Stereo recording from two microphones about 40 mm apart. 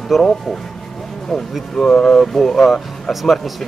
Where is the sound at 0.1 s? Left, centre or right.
Centre.